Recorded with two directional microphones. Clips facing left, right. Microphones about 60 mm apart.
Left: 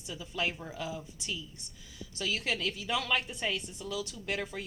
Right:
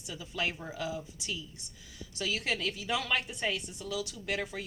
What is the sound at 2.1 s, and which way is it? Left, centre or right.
A woman's voice, centre.